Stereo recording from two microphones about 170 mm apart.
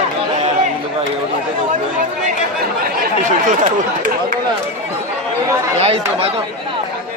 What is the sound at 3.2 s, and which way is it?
Speech, 50° right (ahead or behind).